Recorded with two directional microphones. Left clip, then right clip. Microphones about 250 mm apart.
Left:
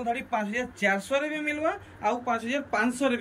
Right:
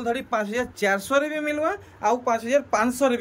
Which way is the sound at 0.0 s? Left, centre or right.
Centre.